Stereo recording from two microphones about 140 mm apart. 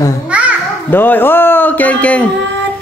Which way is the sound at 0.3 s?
10° right (ahead or behind).